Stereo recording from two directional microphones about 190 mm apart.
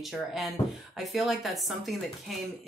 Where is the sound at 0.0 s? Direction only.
Centre (ahead or behind).